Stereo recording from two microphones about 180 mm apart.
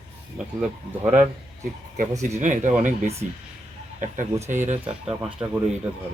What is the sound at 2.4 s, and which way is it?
Speech, 45° right (ahead or behind).